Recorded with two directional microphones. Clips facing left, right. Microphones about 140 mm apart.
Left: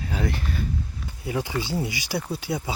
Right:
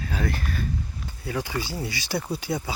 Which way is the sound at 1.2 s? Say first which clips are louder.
Left 2 dB; 20° left (ahead or behind).